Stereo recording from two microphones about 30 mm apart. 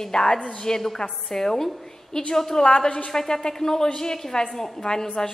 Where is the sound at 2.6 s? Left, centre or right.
Left.